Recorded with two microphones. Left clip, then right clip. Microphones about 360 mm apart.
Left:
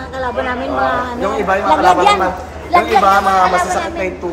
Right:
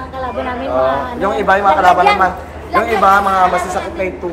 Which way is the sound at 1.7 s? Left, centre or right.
Left.